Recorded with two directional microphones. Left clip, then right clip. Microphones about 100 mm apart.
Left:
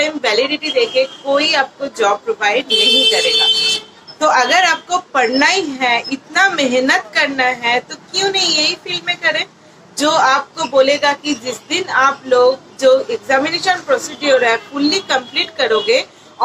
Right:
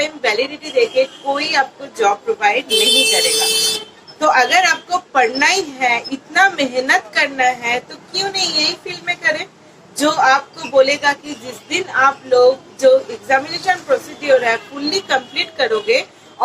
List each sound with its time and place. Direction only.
0.0 s a woman's voice: 30° left (ahead or behind)